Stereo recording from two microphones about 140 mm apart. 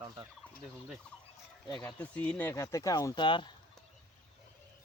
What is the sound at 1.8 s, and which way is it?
Speech, 10° left (ahead or behind).